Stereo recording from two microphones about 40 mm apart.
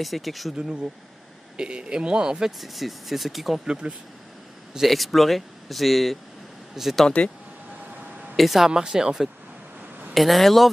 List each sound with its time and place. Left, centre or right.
0.0 s speech: centre
1.6 s speech: right
2.6 s speech: centre
3.6 s speech: right
4.8 s speech: centre
8.4 s speech: centre
10.1 s speech: centre